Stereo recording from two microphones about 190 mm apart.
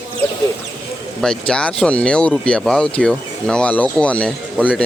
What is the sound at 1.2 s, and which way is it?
Speech, 5° left (ahead or behind).